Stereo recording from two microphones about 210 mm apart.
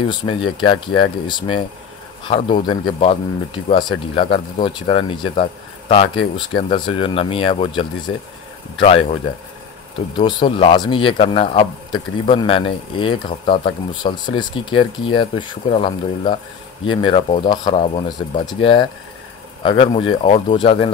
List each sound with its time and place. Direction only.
0.1 s a man's voice: 20° left (ahead or behind)